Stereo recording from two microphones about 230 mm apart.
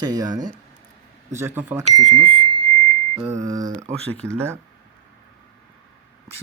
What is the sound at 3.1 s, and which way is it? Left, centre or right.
Speech, centre.